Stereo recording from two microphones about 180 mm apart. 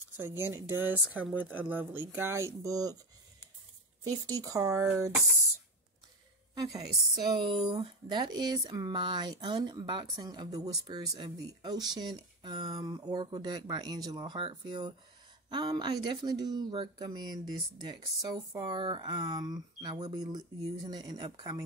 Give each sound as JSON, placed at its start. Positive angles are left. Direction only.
{"t": 0.2, "sound": "speech", "side_deg": -15}
{"t": 6.5, "sound": "a woman's voice", "side_deg": -20}